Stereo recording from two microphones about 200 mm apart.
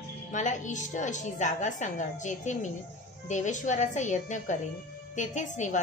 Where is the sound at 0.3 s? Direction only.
40° left (ahead or behind).